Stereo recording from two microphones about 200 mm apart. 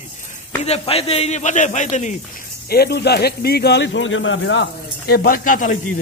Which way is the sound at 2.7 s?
55° left (ahead or behind).